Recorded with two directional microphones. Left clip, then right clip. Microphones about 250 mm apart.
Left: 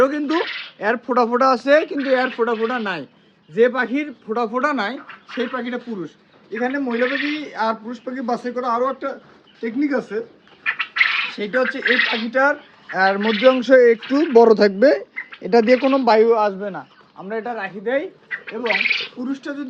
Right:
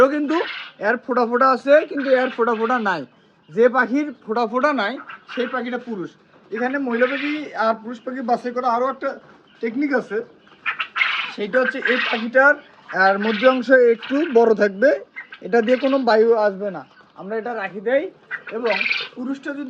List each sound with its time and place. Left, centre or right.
0.0 s speech: centre; by 1.9 s left
1.9 s a man's voice: centre
2.5 s speech: centre
3.5 s a man's voice: centre
13.7 s speech: left
14.0 s a man's voice: centre
14.3 s speech: left
16.6 s speech: centre